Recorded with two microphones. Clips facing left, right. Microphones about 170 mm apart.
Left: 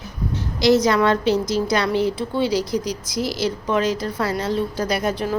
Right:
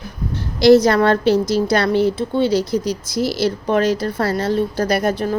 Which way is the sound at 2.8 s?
5° right (ahead or behind).